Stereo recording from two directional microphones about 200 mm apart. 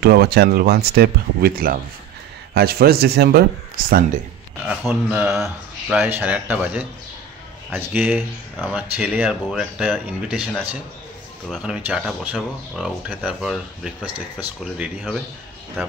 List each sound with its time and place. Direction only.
0.0 s speech: 50° right (ahead or behind)
4.6 s speech: 5° right (ahead or behind)